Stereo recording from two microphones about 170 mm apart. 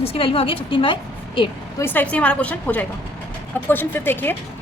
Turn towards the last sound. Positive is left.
turn(degrees=10)  # may be behind; listen again after turning